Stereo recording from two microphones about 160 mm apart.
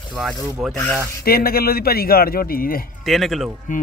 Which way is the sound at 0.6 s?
Centre (ahead or behind).